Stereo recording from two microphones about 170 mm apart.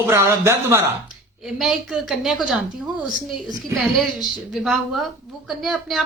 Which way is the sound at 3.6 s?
Centre (ahead or behind).